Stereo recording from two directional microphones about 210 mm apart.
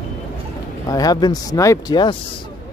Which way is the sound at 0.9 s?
15° left (ahead or behind).